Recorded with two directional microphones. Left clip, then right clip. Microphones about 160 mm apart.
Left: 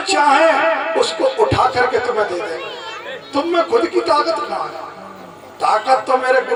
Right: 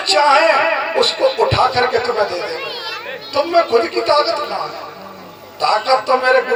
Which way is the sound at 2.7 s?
60° right (ahead or behind).